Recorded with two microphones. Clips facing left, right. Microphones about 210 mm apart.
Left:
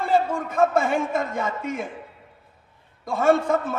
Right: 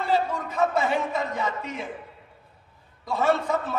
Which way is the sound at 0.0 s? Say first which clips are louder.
Left 3 dB; 50° left (ahead or behind).